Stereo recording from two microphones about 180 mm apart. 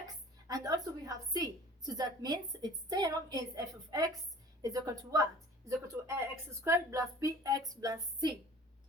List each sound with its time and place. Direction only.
0.4 s a woman's voice: 20° right (ahead or behind)